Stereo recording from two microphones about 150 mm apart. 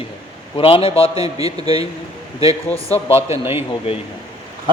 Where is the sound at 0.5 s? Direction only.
35° left (ahead or behind).